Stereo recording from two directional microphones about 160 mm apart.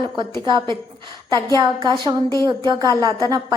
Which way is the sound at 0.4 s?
30° right (ahead or behind).